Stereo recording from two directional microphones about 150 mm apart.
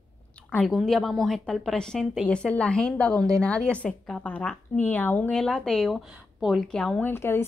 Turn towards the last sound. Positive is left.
turn(degrees=15)  # may be behind; listen again after turning